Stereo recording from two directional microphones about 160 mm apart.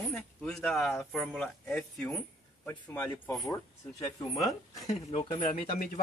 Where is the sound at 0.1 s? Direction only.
5° left (ahead or behind).